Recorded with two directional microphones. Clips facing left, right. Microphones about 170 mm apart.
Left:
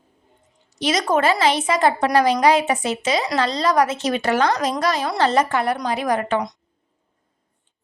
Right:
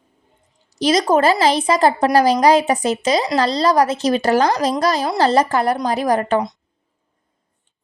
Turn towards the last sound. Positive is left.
turn(degrees=-35)  # may be behind; listen again after turning